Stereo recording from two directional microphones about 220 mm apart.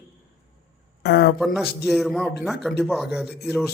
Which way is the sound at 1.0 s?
50° left (ahead or behind).